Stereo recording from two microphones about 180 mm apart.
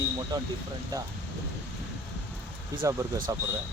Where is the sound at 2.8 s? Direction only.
20° right (ahead or behind).